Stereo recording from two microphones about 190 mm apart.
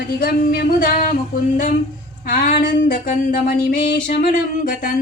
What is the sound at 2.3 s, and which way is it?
Music, 45° left (ahead or behind).